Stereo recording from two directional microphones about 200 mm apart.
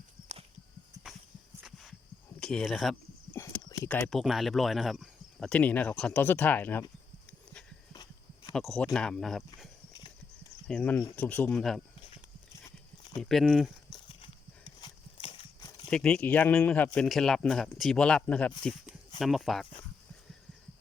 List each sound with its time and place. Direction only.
1.6 s a sound: centre (ahead or behind)
2.4 s speech: 5° left (ahead or behind)
3.3 s speech: 15° left (ahead or behind)
8.5 s speech: 5° left (ahead or behind)
10.7 s speech: 5° left (ahead or behind)
13.0 s a sound: 20° left (ahead or behind)
13.2 s speech: centre (ahead or behind)
14.8 s horse: 25° left (ahead or behind)
15.9 s speech: 5° left (ahead or behind)